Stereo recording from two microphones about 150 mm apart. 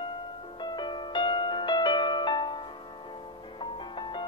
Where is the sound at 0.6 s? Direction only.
30° left (ahead or behind).